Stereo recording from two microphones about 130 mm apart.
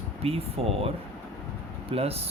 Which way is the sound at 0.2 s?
50° right (ahead or behind).